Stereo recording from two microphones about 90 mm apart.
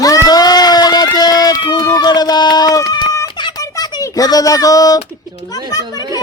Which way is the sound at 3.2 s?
60° left (ahead or behind).